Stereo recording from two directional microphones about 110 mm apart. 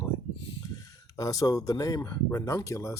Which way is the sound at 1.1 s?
30° left (ahead or behind).